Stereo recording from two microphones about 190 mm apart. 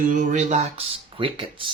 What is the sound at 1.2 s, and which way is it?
Speech, 30° right (ahead or behind).